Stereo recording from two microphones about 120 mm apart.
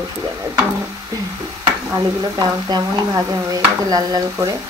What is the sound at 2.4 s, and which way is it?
Stir, 35° right (ahead or behind).